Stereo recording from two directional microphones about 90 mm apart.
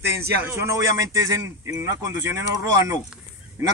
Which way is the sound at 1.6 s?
30° right (ahead or behind).